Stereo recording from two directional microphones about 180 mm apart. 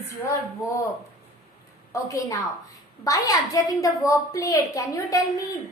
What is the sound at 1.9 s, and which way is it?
A woman's voice, 20° left (ahead or behind).